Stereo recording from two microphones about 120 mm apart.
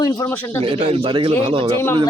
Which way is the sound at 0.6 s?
45° right (ahead or behind).